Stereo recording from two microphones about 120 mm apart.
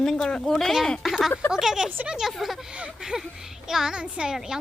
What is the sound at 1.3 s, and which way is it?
Speech, 20° left (ahead or behind).